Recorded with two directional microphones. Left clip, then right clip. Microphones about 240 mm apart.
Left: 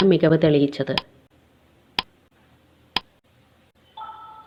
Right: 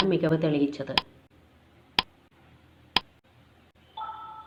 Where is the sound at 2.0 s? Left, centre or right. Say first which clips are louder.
Even; centre.